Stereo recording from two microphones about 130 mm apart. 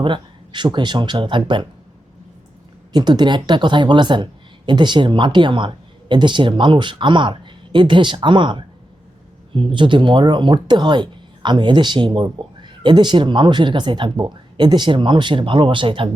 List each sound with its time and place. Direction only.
0.0 s speech: 35° right (ahead or behind)
2.9 s speech: 35° right (ahead or behind)